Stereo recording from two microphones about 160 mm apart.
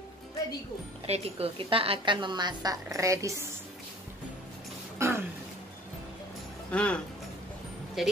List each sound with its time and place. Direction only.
1.0 s a woman's voice: 40° right (ahead or behind); by 3.4 s 20° right (ahead or behind)
4.9 s throat clearing: 15° right (ahead or behind)
6.7 s speech: 5° left (ahead or behind)